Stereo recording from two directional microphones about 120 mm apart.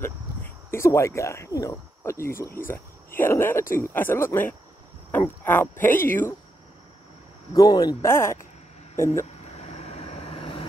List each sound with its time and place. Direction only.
0.7 s speech: 25° left (ahead or behind)
7.5 s speech: 35° left (ahead or behind)
8.0 s speech: 20° left (ahead or behind)
9.2 s vehicle: 65° left (ahead or behind)